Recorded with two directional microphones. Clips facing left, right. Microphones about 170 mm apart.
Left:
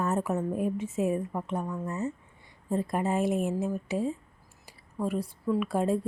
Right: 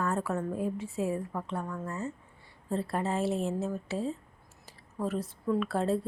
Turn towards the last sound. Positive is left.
turn(degrees=15)  # may be behind; listen again after turning